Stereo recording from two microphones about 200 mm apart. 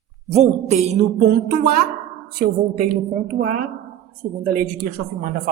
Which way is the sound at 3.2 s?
45° right (ahead or behind).